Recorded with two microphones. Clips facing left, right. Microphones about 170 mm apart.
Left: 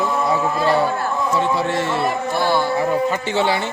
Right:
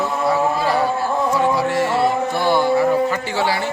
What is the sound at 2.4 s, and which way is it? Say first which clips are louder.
Speech: right 3 dB; 15° right (ahead or behind).